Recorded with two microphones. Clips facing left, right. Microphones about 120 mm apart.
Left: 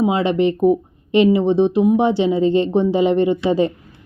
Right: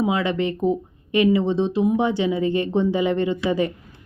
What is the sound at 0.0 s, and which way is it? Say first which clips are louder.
A woman's voice: left 5 dB; 25° left (ahead or behind).